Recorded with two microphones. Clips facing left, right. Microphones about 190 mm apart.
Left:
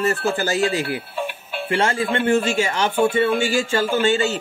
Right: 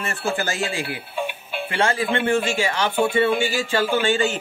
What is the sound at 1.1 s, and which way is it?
Music, centre (ahead or behind).